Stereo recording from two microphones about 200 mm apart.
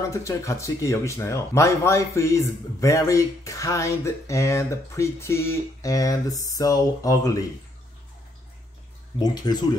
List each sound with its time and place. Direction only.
0.1 s speech: 15° left (ahead or behind)
9.2 s speech: 20° left (ahead or behind)